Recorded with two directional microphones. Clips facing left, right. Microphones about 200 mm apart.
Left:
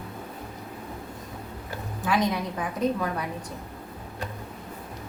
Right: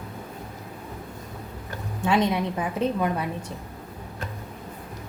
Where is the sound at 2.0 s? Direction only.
25° right (ahead or behind).